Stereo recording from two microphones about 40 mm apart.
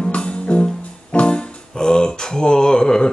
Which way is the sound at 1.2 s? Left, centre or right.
Left.